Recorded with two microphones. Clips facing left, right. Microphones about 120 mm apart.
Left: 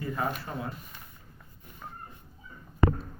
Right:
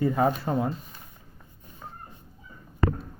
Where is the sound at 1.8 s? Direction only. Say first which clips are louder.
Right 1 dB; 15° right (ahead or behind).